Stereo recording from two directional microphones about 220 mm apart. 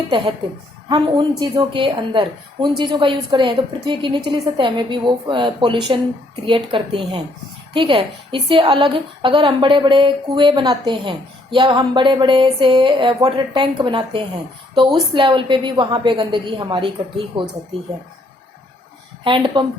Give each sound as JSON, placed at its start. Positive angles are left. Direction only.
{"t": 0.9, "sound": "a woman's voice", "side_deg": -20}
{"t": 19.2, "sound": "a woman's voice", "side_deg": -20}